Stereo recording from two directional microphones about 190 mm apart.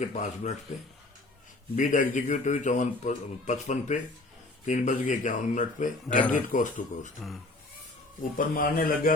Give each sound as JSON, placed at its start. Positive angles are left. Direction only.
{"t": 0.0, "sound": "speech", "side_deg": 40}
{"t": 1.7, "sound": "a man's voice", "side_deg": 45}
{"t": 8.4, "sound": "a man's voice", "side_deg": 50}